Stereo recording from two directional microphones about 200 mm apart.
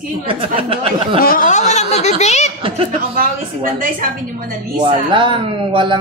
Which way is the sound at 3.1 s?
45° right (ahead or behind).